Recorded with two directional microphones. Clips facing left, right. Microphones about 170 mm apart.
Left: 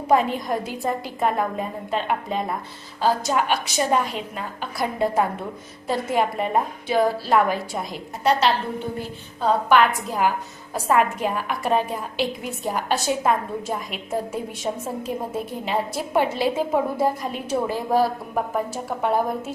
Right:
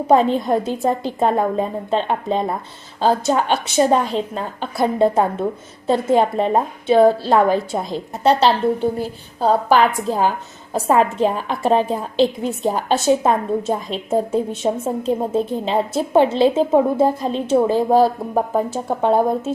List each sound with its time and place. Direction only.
0.1 s a woman's voice: 30° right (ahead or behind)